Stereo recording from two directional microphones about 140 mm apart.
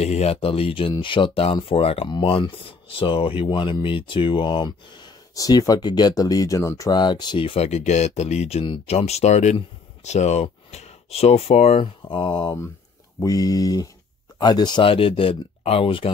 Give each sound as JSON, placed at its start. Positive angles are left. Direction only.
{"t": 0.0, "sound": "speech", "side_deg": 50}